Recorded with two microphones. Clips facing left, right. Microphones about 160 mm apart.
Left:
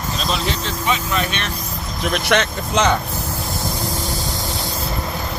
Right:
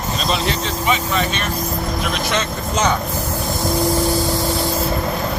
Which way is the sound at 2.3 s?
65° left (ahead or behind).